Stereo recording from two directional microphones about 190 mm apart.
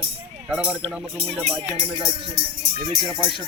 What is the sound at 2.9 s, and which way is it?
Speech, 25° right (ahead or behind).